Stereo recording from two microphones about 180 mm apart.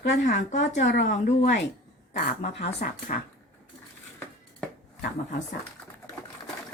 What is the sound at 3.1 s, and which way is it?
Speech, 45° left (ahead or behind).